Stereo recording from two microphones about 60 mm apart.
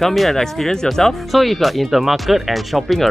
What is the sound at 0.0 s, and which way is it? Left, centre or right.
Speech, centre.